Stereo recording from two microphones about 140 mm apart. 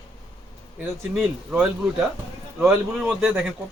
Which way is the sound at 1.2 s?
5° right (ahead or behind).